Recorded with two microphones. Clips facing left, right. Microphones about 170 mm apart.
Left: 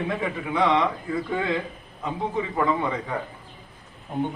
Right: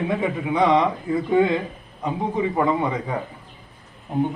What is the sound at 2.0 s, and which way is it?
Speech, 20° right (ahead or behind).